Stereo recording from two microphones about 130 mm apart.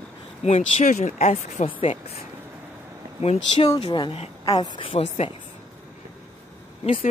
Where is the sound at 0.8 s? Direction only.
75° left (ahead or behind).